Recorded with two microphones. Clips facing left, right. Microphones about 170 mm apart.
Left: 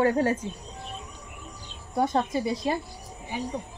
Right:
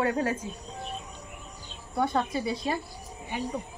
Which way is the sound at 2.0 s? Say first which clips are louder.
Left 2 dB; 20° left (ahead or behind).